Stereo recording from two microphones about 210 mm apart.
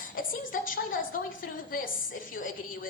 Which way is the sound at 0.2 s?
40° left (ahead or behind).